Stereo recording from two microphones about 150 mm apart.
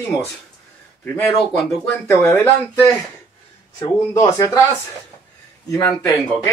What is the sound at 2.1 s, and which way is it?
A man's voice, 15° left (ahead or behind).